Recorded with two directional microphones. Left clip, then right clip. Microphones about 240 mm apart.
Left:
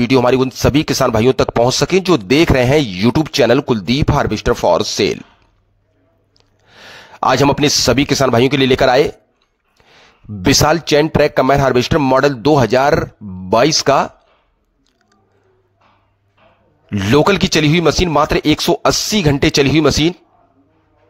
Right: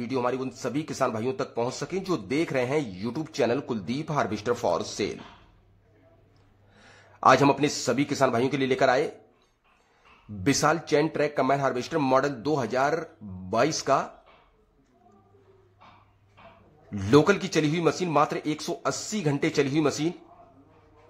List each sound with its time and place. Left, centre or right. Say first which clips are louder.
0.0 s speech: left 16 dB; left
6.7 s speech: left 17 dB; left
16.9 s speech: left 8 dB; left